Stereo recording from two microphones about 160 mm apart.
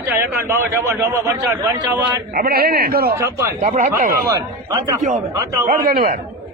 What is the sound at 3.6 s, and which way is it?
Speech, 50° right (ahead or behind).